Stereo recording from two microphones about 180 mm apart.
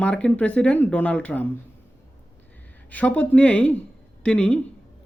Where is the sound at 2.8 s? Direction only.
10° left (ahead or behind).